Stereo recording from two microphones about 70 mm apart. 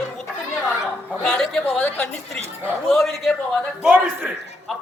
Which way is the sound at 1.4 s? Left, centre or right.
Centre.